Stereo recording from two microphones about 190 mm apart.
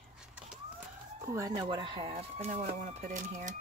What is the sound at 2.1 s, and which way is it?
Speech, 40° right (ahead or behind).